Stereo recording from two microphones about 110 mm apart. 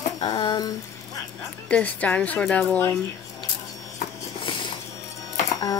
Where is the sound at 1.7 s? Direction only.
15° left (ahead or behind).